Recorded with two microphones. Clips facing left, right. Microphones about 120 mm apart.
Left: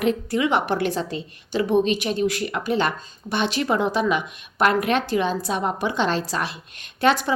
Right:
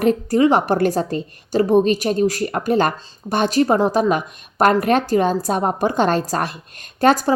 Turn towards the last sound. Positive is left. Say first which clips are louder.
# right 5 dB
turn(degrees=-40)  # may be behind; listen again after turning